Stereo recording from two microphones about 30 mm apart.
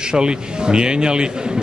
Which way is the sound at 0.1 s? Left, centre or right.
Right.